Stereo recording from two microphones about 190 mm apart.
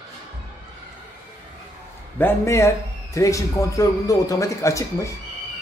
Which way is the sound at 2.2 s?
15° left (ahead or behind).